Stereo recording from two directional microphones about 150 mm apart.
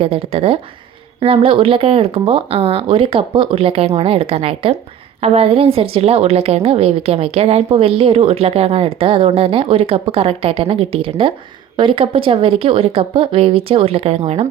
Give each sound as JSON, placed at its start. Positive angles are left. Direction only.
{"t": 0.0, "sound": "a woman's voice", "side_deg": -40}